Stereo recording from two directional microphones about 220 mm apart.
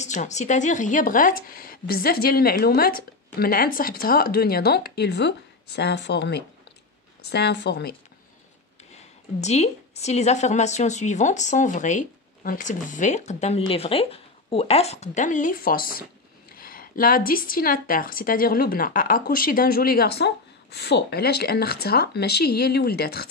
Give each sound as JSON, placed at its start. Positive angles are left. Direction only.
{"t": 0.0, "sound": "a woman's voice", "side_deg": 35}
{"t": 8.9, "sound": "a woman's voice", "side_deg": 30}